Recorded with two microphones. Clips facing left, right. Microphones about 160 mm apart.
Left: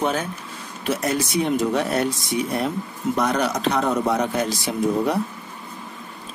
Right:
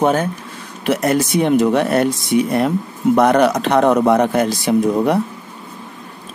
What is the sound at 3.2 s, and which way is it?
Speech, 60° right (ahead or behind).